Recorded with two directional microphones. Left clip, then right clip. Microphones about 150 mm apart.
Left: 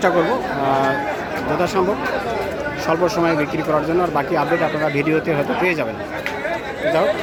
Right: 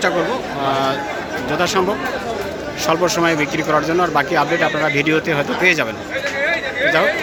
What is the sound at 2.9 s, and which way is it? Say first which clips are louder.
A man's voice: right 2 dB; 5° right (ahead or behind).